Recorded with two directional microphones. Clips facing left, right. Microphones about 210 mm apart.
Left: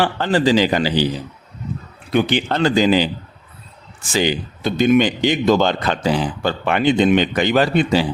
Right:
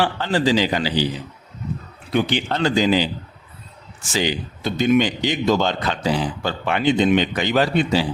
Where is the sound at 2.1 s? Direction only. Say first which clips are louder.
Left 3 dB; 55° left (ahead or behind).